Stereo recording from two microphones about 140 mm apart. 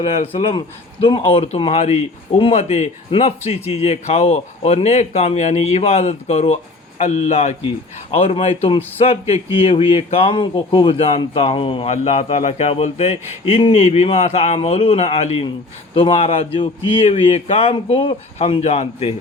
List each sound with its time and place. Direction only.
0.0 s speech: 40° left (ahead or behind)